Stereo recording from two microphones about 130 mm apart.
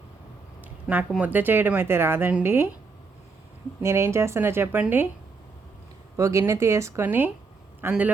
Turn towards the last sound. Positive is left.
turn(degrees=-20)  # may be behind; listen again after turning